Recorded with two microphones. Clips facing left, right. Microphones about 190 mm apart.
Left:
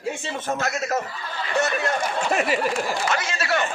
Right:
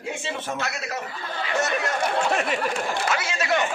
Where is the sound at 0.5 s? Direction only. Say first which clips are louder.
Left 5 dB; 45° left (ahead or behind).